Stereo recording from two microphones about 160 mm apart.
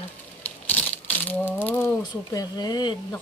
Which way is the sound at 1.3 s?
10° left (ahead or behind).